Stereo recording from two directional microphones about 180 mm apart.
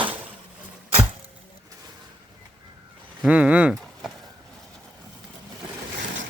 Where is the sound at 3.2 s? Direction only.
5° right (ahead or behind).